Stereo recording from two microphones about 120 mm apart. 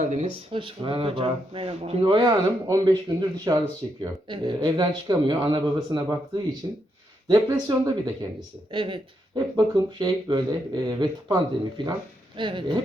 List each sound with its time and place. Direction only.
0.1 s speech: 65° right (ahead or behind)
0.5 s speech: 45° right (ahead or behind)
4.3 s speech: 40° right (ahead or behind)
8.7 s speech: 45° right (ahead or behind)
9.3 s speech: 35° right (ahead or behind)